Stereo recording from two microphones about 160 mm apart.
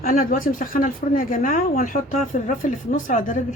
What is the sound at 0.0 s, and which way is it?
Speech, 65° left (ahead or behind).